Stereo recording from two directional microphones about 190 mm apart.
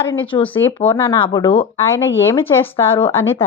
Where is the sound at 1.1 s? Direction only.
25° left (ahead or behind).